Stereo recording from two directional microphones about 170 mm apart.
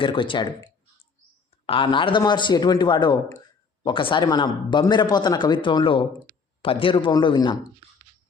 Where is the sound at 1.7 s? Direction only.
30° left (ahead or behind).